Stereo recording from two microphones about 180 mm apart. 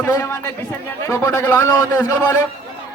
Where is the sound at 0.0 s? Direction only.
15° left (ahead or behind).